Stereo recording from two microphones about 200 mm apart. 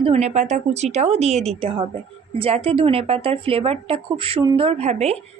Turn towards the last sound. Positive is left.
turn(degrees=-30)  # may be behind; listen again after turning